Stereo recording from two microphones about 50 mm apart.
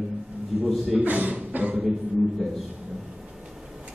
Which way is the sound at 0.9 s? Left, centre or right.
Right.